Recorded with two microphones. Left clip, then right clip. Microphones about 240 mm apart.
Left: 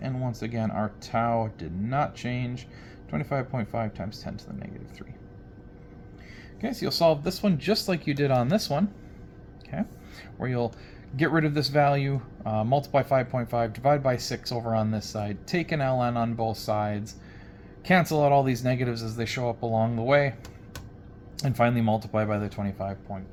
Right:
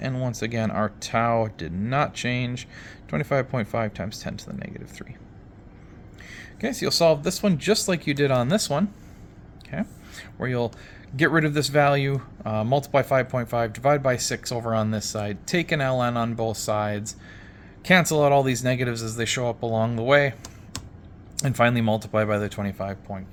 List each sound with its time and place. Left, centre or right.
0.0 s speech: right
6.3 s speech: right
9.6 s a sound: centre
11.2 s speech: centre